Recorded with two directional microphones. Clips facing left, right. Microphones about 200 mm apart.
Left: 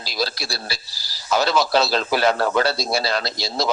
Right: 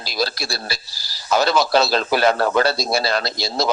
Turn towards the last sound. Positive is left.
turn(degrees=-50)  # may be behind; listen again after turning